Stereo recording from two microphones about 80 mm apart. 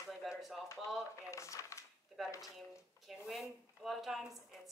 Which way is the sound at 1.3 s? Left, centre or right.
Left.